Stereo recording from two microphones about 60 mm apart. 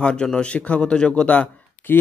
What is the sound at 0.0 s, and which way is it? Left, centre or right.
Speech, centre.